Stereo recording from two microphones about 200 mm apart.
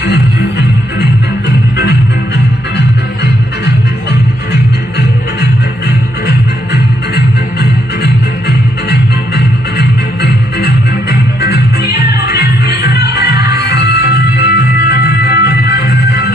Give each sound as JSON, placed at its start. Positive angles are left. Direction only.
{"t": 0.0, "sound": "music", "side_deg": 55}
{"t": 7.6, "sound": "music", "side_deg": 55}